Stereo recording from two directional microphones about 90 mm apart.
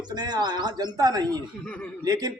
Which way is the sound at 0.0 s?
50° right (ahead or behind).